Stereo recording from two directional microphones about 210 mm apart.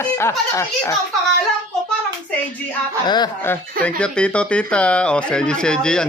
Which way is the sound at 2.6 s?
10° left (ahead or behind).